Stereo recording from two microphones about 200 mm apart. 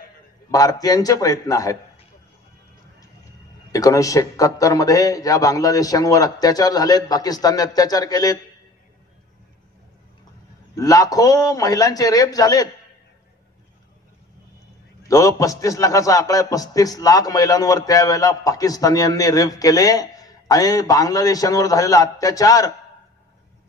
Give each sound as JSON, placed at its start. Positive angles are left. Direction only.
{"t": 0.5, "sound": "a man's voice", "side_deg": 20}
{"t": 3.7, "sound": "a man's voice", "side_deg": 15}
{"t": 10.8, "sound": "a man's voice", "side_deg": 20}
{"t": 15.0, "sound": "a man's voice", "side_deg": 15}